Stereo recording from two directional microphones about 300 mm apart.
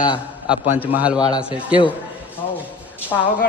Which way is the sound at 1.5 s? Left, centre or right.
Centre.